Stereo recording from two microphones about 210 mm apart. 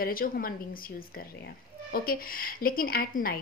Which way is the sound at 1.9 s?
45° left (ahead or behind).